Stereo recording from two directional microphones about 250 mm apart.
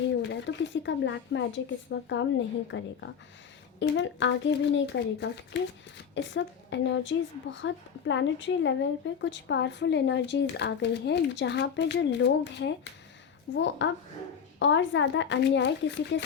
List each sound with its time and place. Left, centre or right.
0.2 s a woman's voice: left